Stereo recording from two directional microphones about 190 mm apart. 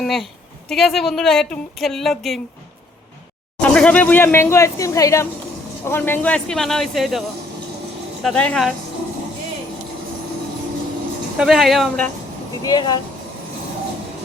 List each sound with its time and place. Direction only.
0.0 s speech: centre (ahead or behind)
3.6 s speech: 5° left (ahead or behind)
11.3 s speech: centre (ahead or behind)
12.6 s speech: 20° left (ahead or behind)